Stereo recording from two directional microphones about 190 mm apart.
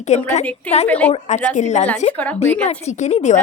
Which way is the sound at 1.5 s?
40° left (ahead or behind).